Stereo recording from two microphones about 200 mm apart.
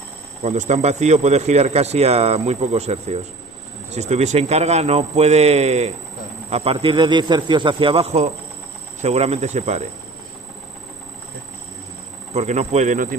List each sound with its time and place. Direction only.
0.4 s a man's voice: 35° right (ahead or behind)
12.3 s speech: 35° right (ahead or behind)